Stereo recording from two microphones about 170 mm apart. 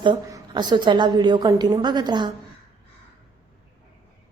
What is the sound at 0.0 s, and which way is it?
A woman's voice, 25° right (ahead or behind).